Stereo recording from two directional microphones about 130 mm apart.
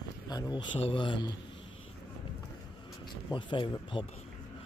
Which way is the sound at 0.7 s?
40° left (ahead or behind).